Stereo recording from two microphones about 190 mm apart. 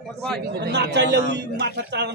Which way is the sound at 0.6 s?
65° right (ahead or behind).